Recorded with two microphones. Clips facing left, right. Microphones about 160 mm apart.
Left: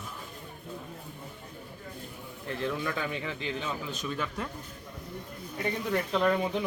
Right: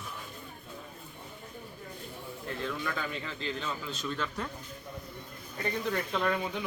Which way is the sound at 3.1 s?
15° left (ahead or behind).